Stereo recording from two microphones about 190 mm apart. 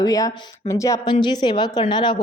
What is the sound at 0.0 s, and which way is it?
A woman's voice, 20° left (ahead or behind).